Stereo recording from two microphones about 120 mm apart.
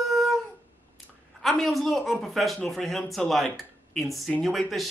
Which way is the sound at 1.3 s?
Centre (ahead or behind).